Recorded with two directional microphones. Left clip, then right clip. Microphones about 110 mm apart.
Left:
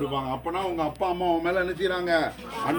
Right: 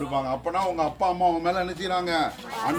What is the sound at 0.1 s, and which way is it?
A man's voice, 45° right (ahead or behind).